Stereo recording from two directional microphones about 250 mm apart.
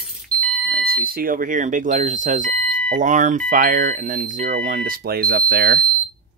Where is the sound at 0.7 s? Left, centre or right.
Right.